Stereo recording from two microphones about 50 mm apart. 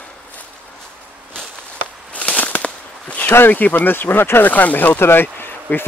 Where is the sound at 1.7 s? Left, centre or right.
Left.